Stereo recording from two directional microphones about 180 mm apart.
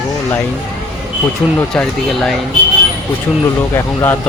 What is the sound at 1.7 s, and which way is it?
Speech, 5° left (ahead or behind).